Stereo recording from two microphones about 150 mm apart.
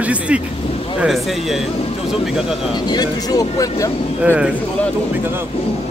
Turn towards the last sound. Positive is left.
turn(degrees=-10)  # may be behind; listen again after turning